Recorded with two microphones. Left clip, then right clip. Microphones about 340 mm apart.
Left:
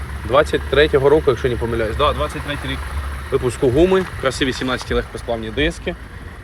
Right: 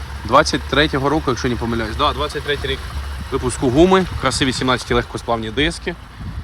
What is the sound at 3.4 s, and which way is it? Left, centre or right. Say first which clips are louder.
Speech: right 1 dB; centre.